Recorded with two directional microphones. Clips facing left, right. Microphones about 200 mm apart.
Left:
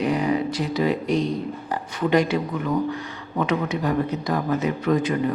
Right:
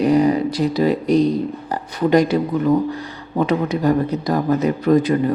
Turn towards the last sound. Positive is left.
turn(degrees=-35)  # may be behind; listen again after turning